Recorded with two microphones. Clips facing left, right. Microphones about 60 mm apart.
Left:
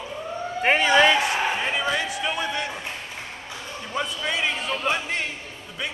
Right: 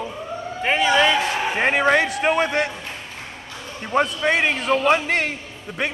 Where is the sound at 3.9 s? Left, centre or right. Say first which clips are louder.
Right 8 dB; right.